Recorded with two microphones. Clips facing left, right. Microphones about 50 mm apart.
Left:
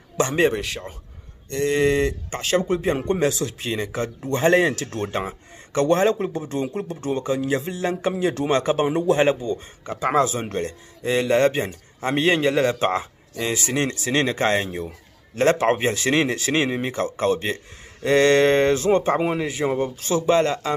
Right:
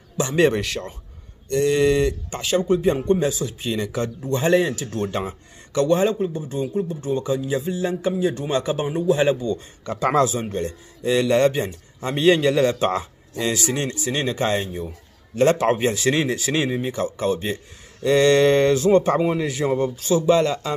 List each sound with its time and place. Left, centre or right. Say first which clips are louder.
0.5 s speech: right 2 dB; centre
1.5 s a man's voice: right 2 dB; left
2.4 s a man's voice: right 2 dB; left
3.0 s speech: right 1 dB; left
3.7 s a man's voice: right 1 dB; left
4.4 s a man's voice: left 1 dB; left
5.9 s a man's voice: left 1 dB; left
6.1 s speech: right 1 dB; left
8.1 s a man's voice: left 2 dB; left
9.4 s a man's voice: right 1 dB; left
13.7 s a man's voice: left 1 dB; left
14.6 s a man's voice: left 1 dB; left
20.0 s a man's voice: right 1 dB; left